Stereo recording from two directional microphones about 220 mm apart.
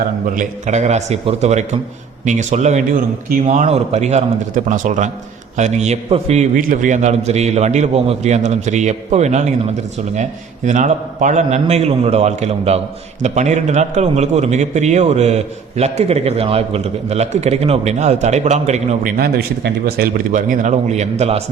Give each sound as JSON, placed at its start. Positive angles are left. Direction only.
{"t": 0.3, "sound": "a man's voice", "side_deg": -35}
{"t": 19.1, "sound": "a man's voice", "side_deg": -45}